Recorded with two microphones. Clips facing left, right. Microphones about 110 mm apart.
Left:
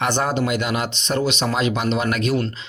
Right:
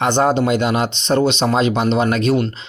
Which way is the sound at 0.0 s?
25° right (ahead or behind).